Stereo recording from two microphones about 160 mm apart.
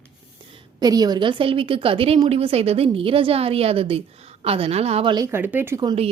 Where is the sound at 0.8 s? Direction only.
25° right (ahead or behind).